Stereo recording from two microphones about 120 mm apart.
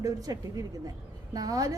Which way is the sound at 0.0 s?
30° right (ahead or behind).